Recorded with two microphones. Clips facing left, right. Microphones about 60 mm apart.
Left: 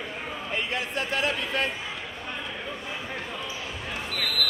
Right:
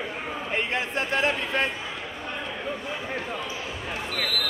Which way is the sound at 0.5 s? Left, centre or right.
Right.